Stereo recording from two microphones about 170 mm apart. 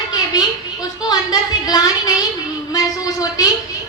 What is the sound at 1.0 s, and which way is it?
A woman's voice, 25° left (ahead or behind).